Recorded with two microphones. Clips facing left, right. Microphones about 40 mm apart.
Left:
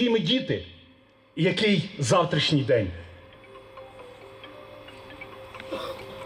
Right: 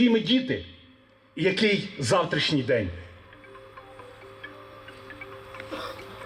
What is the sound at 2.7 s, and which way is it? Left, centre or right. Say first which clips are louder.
Speech: left 2 dB; right.